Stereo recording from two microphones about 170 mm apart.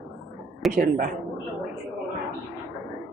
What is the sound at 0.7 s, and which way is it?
Speech, 55° right (ahead or behind).